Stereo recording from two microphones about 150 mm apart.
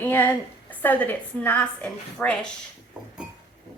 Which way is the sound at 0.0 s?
15° left (ahead or behind).